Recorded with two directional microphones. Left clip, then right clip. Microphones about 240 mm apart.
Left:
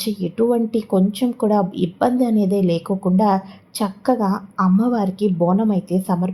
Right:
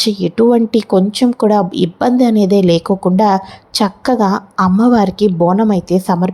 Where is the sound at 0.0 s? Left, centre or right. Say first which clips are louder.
Right 8 dB; right.